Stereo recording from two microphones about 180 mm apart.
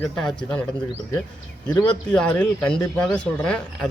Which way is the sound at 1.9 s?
5° left (ahead or behind).